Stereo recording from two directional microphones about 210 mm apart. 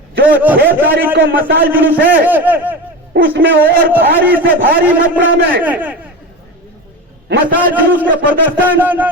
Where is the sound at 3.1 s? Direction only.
45° right (ahead or behind).